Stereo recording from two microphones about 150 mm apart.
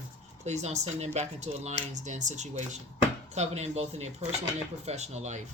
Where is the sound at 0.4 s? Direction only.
50° right (ahead or behind).